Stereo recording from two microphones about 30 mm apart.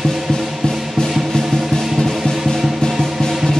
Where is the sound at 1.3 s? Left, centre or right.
Centre.